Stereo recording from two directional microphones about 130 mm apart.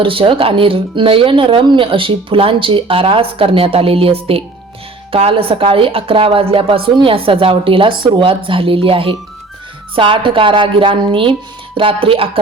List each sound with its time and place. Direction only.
0.0 s speech: 45° right (ahead or behind)